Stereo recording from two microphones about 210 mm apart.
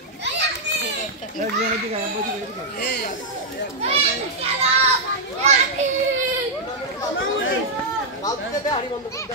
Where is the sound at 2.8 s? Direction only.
45° left (ahead or behind).